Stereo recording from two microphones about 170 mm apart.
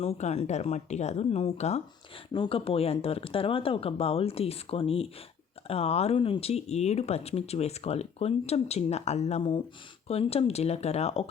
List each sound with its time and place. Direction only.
0.0 s speech: 40° left (ahead or behind)
2.3 s speech: 30° left (ahead or behind)